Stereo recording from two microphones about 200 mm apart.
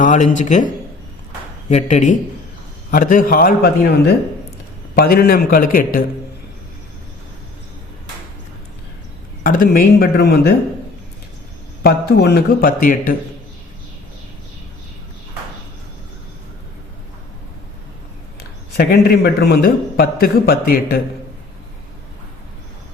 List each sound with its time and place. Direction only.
0.0 s speech: 40° left (ahead or behind)
1.7 s a man's voice: 35° left (ahead or behind)
9.4 s a man's voice: 45° left (ahead or behind)
11.8 s a man's voice: 50° left (ahead or behind)
18.8 s a man's voice: 50° left (ahead or behind)